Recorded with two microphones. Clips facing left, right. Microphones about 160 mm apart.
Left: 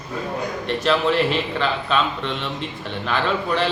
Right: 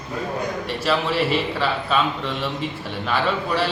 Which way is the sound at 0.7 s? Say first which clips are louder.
Left 5 dB; 5° right (ahead or behind).